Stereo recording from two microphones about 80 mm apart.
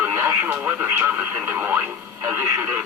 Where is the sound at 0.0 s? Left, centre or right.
Right.